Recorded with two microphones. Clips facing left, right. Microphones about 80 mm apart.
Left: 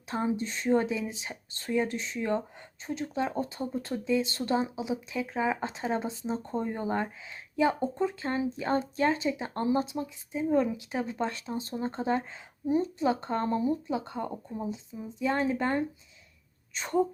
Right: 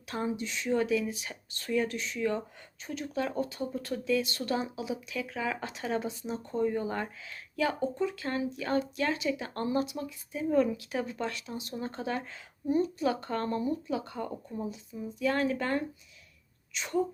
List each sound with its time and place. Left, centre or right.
0.1 s speech: left
0.3 s speech: left
16.7 s speech: left